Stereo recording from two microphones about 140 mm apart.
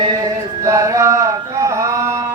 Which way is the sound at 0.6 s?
25° right (ahead or behind).